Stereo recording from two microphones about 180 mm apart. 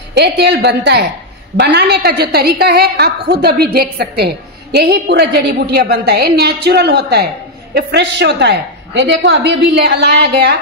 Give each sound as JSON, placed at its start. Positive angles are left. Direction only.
{"t": 0.1, "sound": "a woman's voice", "side_deg": -70}